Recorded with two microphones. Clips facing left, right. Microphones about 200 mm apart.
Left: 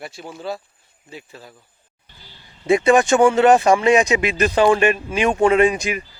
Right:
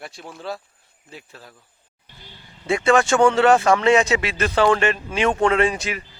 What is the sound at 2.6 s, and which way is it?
Speech, 20° left (ahead or behind).